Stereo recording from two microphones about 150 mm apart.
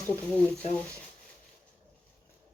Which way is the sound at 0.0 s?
10° left (ahead or behind).